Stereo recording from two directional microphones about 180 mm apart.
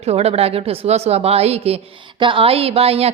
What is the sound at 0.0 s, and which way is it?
A woman's voice, 35° right (ahead or behind).